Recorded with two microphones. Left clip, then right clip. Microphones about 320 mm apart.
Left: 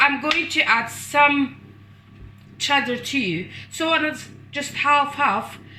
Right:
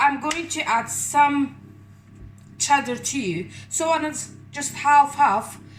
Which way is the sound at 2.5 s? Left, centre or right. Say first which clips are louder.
Even; right.